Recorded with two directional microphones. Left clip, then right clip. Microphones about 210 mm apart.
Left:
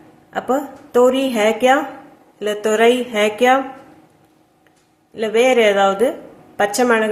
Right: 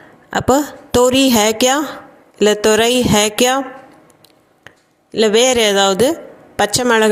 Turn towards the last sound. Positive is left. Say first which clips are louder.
# right 2 dB
turn(degrees=-45)  # may be behind; listen again after turning